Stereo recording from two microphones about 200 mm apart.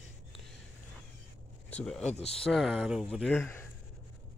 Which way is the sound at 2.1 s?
30° left (ahead or behind).